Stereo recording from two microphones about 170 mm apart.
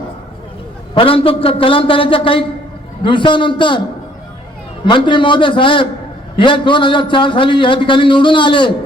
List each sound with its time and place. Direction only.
0.9 s a man's voice: 30° left (ahead or behind)
4.9 s a man's voice: 30° left (ahead or behind)